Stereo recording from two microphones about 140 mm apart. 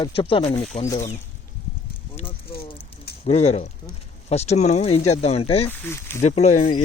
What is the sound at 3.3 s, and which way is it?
Speech, 50° left (ahead or behind).